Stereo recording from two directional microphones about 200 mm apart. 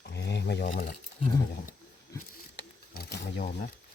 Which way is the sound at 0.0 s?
60° left (ahead or behind).